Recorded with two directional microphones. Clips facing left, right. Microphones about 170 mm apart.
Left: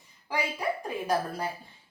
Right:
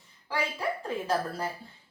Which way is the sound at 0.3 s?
15° left (ahead or behind).